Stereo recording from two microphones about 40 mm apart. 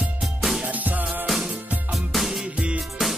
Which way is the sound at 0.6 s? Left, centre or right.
Right.